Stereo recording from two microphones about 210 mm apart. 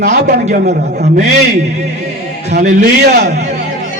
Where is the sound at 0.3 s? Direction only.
35° right (ahead or behind).